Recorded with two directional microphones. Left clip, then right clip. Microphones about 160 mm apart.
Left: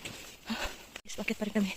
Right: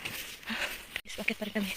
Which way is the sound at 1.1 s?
30° left (ahead or behind).